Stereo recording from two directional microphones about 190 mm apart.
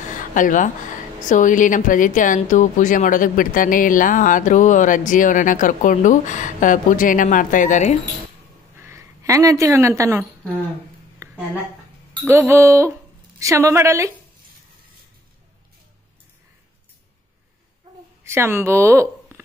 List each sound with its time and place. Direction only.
0.1 s a sound: 45° left (ahead or behind)
1.3 s a woman's voice: 45° left (ahead or behind)
8.7 s a woman's voice: 15° right (ahead or behind)
11.1 s a sound: 10° right (ahead or behind)
12.3 s a woman's voice: 15° right (ahead or behind)
18.2 s a woman's voice: 15° right (ahead or behind)